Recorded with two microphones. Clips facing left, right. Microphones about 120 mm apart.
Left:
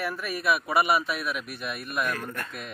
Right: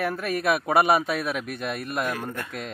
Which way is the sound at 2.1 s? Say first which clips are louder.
Right 2 dB; 15° right (ahead or behind).